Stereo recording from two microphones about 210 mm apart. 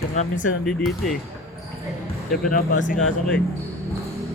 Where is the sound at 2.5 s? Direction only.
40° left (ahead or behind).